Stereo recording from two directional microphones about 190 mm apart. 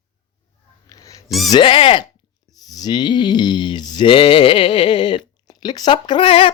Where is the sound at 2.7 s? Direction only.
20° left (ahead or behind).